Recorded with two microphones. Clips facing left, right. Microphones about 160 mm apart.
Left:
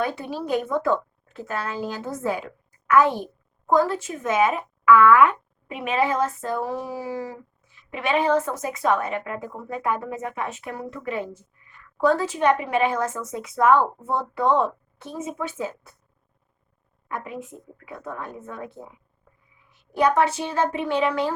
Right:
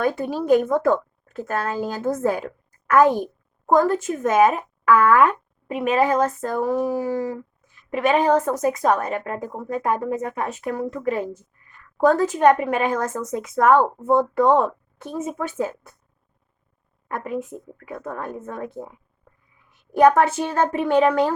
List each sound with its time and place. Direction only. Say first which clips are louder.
0.0 s a child's voice: right 4 dB; 45° right (ahead or behind)
17.1 s a woman's voice: right 5 dB; 45° right (ahead or behind)